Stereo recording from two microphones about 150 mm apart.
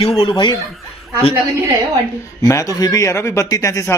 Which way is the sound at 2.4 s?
20° left (ahead or behind).